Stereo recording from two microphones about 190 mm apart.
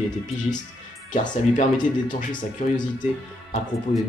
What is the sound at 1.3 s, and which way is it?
Speech, 45° left (ahead or behind).